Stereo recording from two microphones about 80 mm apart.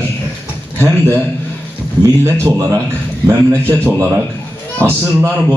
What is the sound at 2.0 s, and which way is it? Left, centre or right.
Speech, right.